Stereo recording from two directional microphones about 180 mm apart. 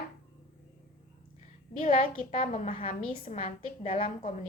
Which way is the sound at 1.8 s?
45° left (ahead or behind).